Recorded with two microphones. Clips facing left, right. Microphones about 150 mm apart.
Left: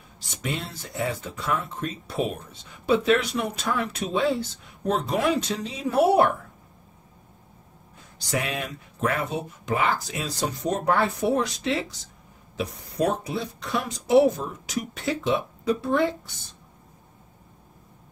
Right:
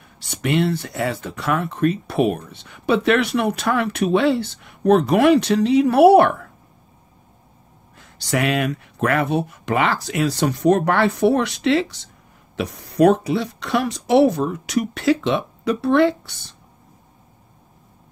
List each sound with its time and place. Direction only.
0.2 s speech: 70° right (ahead or behind)
8.0 s speech: 70° right (ahead or behind)